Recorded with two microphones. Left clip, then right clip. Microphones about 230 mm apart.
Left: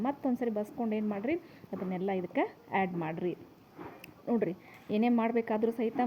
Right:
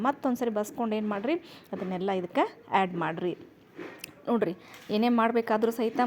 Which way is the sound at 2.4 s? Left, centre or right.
Right.